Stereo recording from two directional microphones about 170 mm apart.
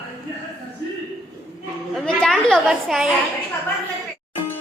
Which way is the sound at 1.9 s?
5° left (ahead or behind).